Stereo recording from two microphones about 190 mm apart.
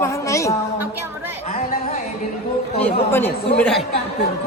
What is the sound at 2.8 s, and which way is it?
A woman's voice, 10° left (ahead or behind).